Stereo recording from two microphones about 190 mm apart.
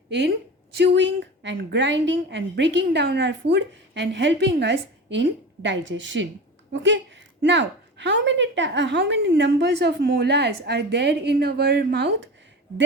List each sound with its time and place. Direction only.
0.1 s a woman's voice: 65° right (ahead or behind)